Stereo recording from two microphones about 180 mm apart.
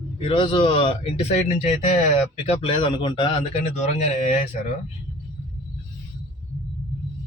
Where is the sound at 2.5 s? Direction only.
30° left (ahead or behind).